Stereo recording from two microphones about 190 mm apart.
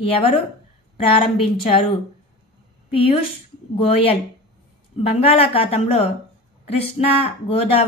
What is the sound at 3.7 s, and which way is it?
Speech, 30° left (ahead or behind).